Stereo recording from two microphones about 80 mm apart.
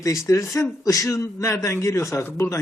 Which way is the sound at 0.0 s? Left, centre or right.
Left.